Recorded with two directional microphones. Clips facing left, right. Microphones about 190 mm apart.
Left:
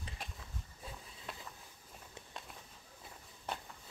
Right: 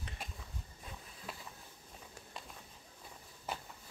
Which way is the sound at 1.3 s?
Centre (ahead or behind).